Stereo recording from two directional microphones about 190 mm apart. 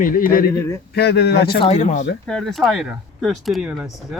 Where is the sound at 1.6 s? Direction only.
35° left (ahead or behind).